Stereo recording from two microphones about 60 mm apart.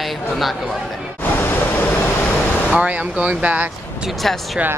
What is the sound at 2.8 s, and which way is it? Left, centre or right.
Speech, right.